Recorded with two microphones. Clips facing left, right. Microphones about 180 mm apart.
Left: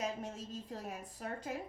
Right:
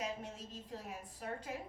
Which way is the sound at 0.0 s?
45° left (ahead or behind).